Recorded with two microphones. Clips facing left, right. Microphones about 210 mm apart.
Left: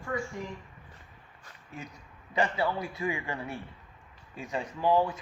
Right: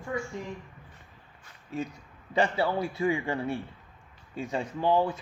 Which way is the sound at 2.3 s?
30° right (ahead or behind).